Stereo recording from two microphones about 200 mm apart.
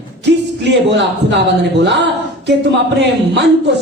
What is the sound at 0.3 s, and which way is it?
A man's voice, 60° right (ahead or behind).